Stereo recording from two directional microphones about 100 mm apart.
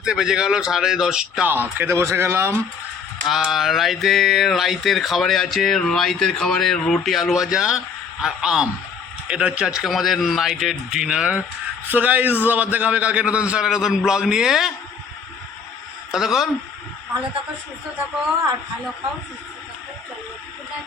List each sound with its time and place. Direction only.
0.0 s speech: 5° right (ahead or behind)
1.5 s speech: 20° right (ahead or behind)
3.2 s a man's voice: 5° right (ahead or behind)
16.1 s speech: 5° right (ahead or behind)